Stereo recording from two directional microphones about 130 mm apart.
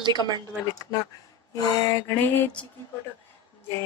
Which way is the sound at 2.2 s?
15° left (ahead or behind).